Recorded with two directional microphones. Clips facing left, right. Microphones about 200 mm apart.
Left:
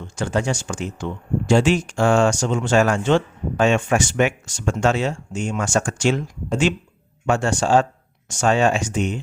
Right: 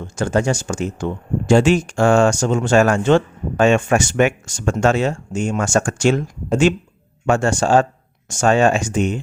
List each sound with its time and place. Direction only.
0.0 s speech: 45° right (ahead or behind)